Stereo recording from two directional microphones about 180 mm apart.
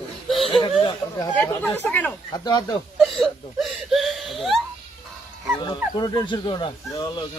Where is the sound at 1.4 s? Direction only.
5° left (ahead or behind).